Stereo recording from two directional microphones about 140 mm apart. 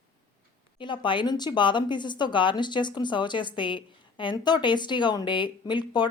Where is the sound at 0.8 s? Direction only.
35° left (ahead or behind).